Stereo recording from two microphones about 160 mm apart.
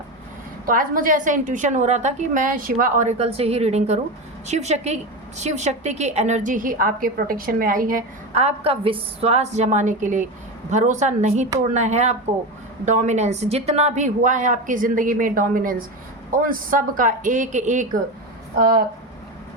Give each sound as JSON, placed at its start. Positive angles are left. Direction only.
{"t": 0.6, "sound": "a woman's voice", "side_deg": -60}
{"t": 8.4, "sound": "a woman's voice", "side_deg": -40}